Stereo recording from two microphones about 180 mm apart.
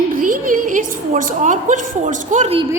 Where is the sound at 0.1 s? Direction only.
50° right (ahead or behind).